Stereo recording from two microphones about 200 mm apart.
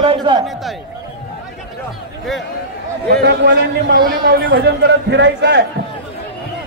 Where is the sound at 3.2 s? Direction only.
55° right (ahead or behind).